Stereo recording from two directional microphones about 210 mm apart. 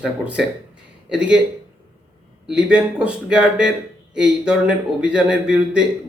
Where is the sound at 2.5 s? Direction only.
5° right (ahead or behind).